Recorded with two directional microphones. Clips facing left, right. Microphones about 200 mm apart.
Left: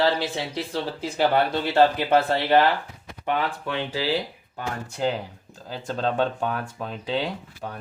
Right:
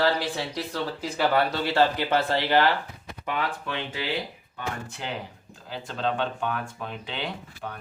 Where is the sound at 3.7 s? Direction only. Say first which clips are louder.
Left 8 dB; 35° left (ahead or behind).